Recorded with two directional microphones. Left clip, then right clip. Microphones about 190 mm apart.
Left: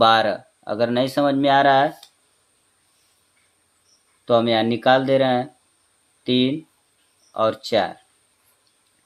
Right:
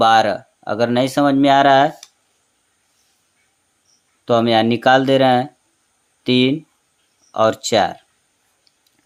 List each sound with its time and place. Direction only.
0.0 s speech: 30° right (ahead or behind)
4.3 s speech: 35° right (ahead or behind)